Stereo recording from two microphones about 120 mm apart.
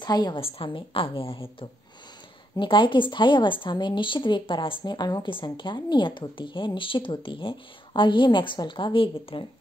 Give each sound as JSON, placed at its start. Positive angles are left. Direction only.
{"t": 0.0, "sound": "a woman's voice", "side_deg": 35}
{"t": 0.4, "sound": "a woman's voice", "side_deg": 50}